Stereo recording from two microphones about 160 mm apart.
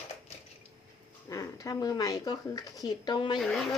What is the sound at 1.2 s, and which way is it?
Speech, 20° left (ahead or behind).